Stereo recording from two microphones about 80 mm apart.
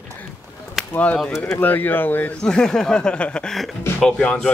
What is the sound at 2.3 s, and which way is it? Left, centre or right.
A man's voice, centre.